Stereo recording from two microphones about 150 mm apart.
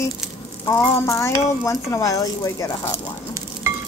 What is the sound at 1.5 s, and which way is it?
A child's voice, 20° left (ahead or behind).